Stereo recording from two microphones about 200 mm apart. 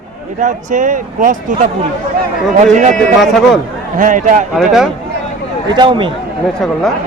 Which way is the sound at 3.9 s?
40° right (ahead or behind).